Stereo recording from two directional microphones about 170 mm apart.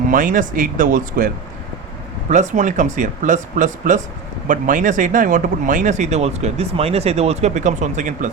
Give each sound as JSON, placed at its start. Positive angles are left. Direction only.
{"t": 0.1, "sound": "speech", "side_deg": -50}
{"t": 2.3, "sound": "speech", "side_deg": -45}